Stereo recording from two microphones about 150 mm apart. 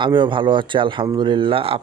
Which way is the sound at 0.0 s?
35° right (ahead or behind).